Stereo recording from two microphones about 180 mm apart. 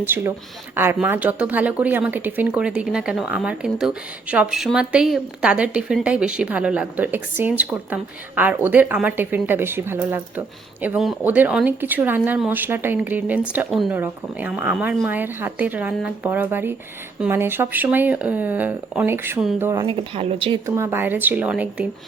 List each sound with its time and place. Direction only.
0.0 s speech: 10° right (ahead or behind)
19.8 s speech: 30° right (ahead or behind)
20.7 s speech: 15° right (ahead or behind)